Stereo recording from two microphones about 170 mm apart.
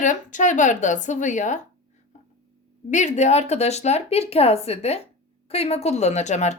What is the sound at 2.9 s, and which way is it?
Speech, 45° left (ahead or behind).